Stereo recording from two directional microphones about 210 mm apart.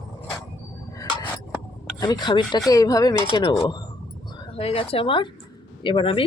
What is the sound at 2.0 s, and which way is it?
Speech, 20° left (ahead or behind).